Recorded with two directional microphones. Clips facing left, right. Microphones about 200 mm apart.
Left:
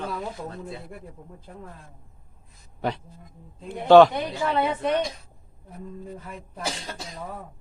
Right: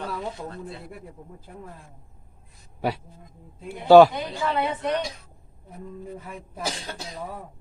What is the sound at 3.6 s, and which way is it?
Speech, 10° right (ahead or behind).